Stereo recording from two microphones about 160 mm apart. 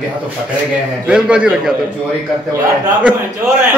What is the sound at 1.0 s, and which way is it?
Speech, 5° right (ahead or behind).